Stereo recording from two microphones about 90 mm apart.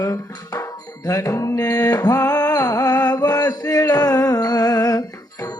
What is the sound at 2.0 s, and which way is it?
Music, 40° left (ahead or behind).